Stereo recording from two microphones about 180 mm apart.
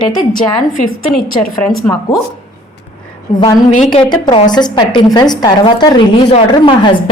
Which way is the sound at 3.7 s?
40° left (ahead or behind).